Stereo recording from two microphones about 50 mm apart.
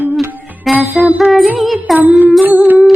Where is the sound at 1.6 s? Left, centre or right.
Centre.